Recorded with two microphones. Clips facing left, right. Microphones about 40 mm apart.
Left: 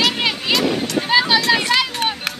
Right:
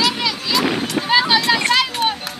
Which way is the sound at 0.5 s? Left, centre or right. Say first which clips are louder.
Even; left.